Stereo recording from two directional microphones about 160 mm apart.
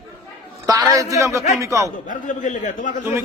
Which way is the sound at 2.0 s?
55° left (ahead or behind).